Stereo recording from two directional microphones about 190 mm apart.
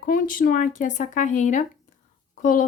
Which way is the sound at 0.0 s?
45° left (ahead or behind).